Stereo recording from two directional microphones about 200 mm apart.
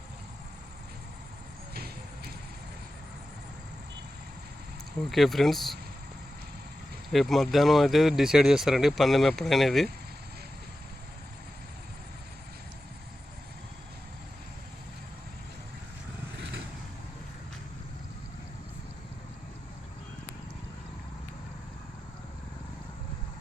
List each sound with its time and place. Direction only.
1.7 s vehicle: 50° right (ahead or behind)
5.0 s speech: centre (ahead or behind)
7.1 s speech: centre (ahead or behind)